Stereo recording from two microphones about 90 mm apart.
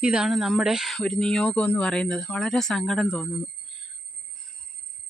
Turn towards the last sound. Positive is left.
turn(degrees=5)  # may be behind; listen again after turning